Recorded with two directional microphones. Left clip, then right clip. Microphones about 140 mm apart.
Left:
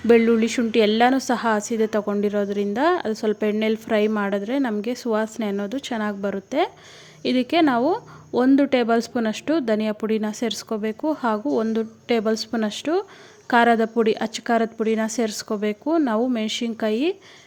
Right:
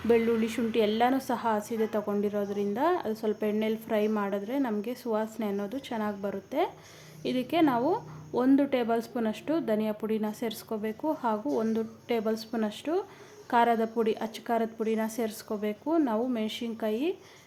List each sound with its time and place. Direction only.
0.1 s a woman's voice: 40° left (ahead or behind)